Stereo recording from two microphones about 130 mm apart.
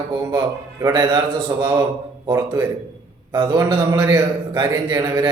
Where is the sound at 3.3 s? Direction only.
30° right (ahead or behind).